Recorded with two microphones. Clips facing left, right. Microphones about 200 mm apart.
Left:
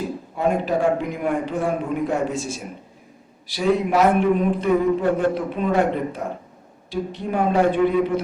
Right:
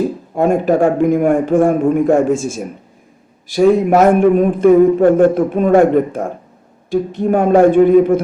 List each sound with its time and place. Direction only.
0.3 s a man's voice: 50° right (ahead or behind)